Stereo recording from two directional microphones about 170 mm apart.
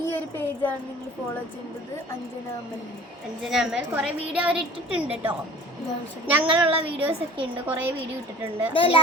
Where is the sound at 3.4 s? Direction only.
Centre (ahead or behind).